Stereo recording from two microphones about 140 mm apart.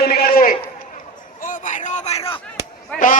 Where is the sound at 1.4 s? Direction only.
70° left (ahead or behind); by 2.4 s 40° left (ahead or behind).